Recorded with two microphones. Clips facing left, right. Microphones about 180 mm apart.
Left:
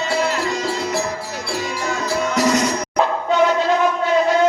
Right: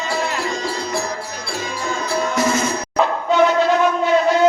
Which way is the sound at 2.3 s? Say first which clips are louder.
Left 3 dB; 20° left (ahead or behind).